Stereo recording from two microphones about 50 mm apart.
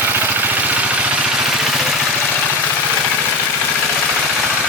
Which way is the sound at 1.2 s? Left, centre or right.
Centre.